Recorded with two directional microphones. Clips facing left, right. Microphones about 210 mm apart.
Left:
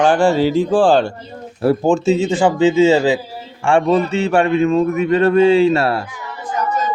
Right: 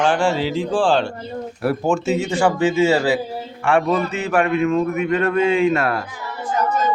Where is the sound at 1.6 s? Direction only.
25° left (ahead or behind).